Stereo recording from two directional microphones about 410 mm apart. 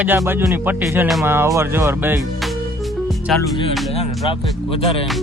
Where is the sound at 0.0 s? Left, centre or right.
Centre.